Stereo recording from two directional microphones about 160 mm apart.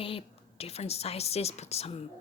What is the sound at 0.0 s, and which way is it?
A woman's voice, 35° left (ahead or behind).